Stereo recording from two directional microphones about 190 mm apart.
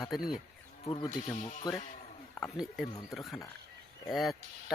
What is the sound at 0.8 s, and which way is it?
Speech, 30° left (ahead or behind).